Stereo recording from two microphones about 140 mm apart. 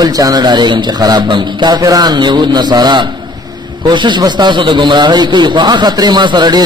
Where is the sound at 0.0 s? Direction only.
25° right (ahead or behind).